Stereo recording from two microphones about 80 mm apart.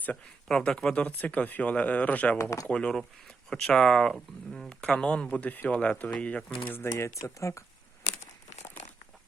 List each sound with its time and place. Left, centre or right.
0.4 s speech: centre
2.4 s speech: left
2.6 s speech: centre
7.2 s speech: left